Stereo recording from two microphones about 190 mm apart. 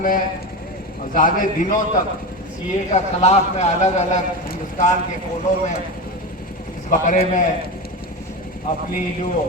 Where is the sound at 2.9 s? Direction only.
35° left (ahead or behind).